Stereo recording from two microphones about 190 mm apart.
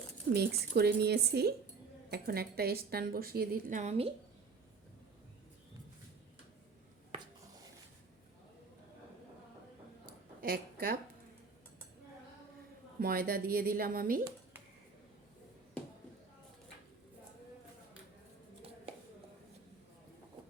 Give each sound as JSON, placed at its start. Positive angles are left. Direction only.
{"t": 0.3, "sound": "speech", "side_deg": -55}
{"t": 10.1, "sound": "a sound", "side_deg": -50}
{"t": 13.0, "sound": "speech", "side_deg": -50}